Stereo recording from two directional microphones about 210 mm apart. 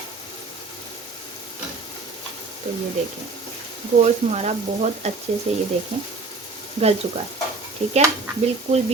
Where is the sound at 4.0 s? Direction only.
30° right (ahead or behind).